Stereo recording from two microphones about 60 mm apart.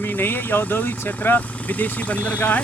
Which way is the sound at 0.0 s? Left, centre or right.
Left.